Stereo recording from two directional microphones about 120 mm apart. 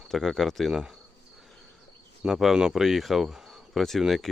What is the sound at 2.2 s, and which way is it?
Speech, 5° right (ahead or behind).